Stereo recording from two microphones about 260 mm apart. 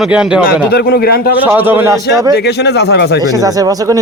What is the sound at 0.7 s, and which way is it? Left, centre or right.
Speech, left.